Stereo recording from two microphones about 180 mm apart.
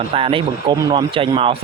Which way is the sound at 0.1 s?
30° right (ahead or behind).